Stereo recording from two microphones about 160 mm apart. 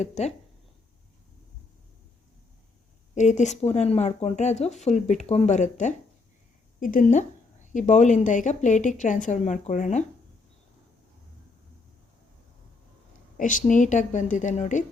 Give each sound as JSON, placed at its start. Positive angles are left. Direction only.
{"t": 0.0, "sound": "speech", "side_deg": 45}
{"t": 3.2, "sound": "speech", "side_deg": 50}
{"t": 13.3, "sound": "speech", "side_deg": 55}